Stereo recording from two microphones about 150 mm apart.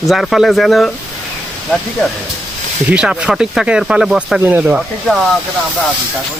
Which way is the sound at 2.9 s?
5° right (ahead or behind).